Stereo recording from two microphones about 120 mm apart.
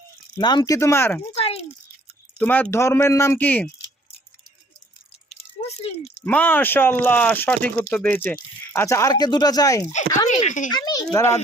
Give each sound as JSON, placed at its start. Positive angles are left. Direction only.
{"t": 0.3, "sound": "speech", "side_deg": 35}
{"t": 1.4, "sound": "a sound", "side_deg": 55}
{"t": 2.4, "sound": "speech", "side_deg": 15}
{"t": 6.1, "sound": "speech", "side_deg": 15}
{"t": 10.2, "sound": "a child's voice", "side_deg": 90}
{"t": 10.7, "sound": "a child's voice", "side_deg": 35}